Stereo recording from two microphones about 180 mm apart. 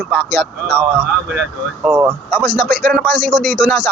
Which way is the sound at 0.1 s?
Centre (ahead or behind).